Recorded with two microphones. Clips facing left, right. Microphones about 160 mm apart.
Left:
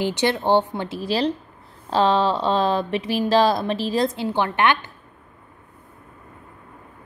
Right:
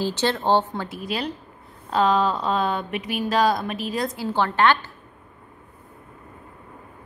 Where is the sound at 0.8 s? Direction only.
30° left (ahead or behind).